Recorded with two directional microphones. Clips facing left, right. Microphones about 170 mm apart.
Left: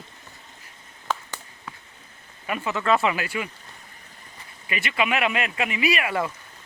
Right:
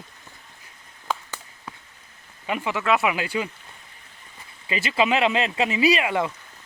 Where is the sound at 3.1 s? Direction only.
25° right (ahead or behind).